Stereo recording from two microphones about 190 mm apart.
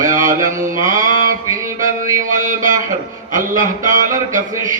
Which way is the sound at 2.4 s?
45° right (ahead or behind).